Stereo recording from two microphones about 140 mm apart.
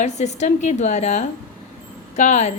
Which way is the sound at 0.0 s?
55° left (ahead or behind).